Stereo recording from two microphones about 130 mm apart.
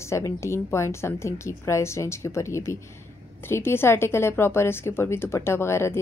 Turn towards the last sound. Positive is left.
turn(degrees=20)  # may be behind; listen again after turning